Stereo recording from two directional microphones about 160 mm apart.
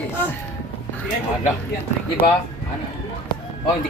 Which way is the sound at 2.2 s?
35° left (ahead or behind).